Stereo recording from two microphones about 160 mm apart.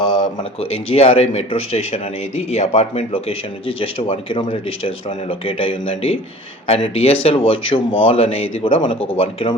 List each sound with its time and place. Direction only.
0.1 s a man's voice: 35° left (ahead or behind)